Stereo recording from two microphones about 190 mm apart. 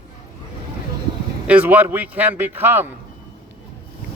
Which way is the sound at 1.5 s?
10° right (ahead or behind).